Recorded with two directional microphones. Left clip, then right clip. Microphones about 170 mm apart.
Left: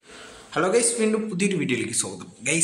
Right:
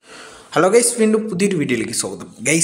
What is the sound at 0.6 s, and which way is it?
A man's voice, 40° right (ahead or behind).